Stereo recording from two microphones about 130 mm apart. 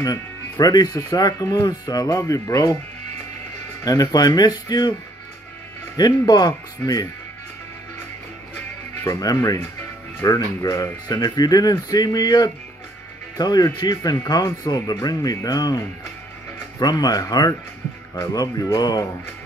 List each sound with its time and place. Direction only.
0.0 s speech: 30° left (ahead or behind)
3.8 s speech: 30° left (ahead or behind)
5.9 s speech: 30° left (ahead or behind)
9.0 s speech: 30° left (ahead or behind)